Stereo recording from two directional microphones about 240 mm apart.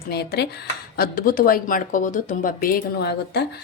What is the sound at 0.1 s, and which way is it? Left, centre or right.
A woman's voice, left.